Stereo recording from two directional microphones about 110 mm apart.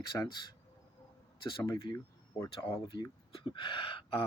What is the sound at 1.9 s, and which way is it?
Speech, 30° left (ahead or behind).